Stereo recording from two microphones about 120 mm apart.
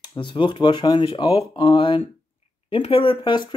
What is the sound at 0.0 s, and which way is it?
Speech, 40° left (ahead or behind).